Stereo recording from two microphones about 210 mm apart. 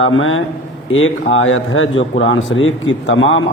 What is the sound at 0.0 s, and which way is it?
A man's voice, 65° left (ahead or behind).